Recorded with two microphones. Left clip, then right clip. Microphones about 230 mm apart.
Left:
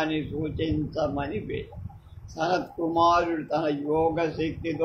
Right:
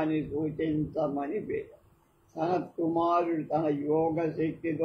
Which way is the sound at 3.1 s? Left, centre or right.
Left.